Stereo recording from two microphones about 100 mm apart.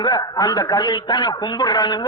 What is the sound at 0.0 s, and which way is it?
A man's voice, 45° left (ahead or behind).